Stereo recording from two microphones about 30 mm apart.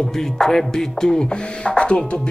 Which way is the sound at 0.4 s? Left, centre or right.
Centre.